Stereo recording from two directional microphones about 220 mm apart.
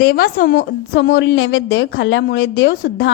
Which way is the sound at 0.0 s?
45° left (ahead or behind).